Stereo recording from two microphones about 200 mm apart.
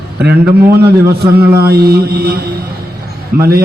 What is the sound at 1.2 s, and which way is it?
Mantra, 50° right (ahead or behind).